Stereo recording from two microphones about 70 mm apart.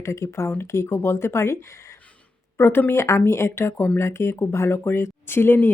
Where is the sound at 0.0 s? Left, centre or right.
Left.